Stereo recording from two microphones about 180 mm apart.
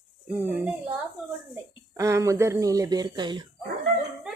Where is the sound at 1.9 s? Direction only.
15° right (ahead or behind).